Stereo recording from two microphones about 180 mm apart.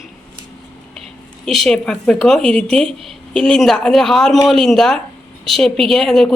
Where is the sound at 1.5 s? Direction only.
Centre (ahead or behind).